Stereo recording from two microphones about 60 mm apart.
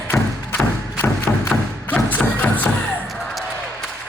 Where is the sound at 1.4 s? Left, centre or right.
Left.